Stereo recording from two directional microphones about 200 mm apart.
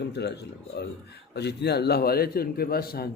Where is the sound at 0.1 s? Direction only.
60° left (ahead or behind).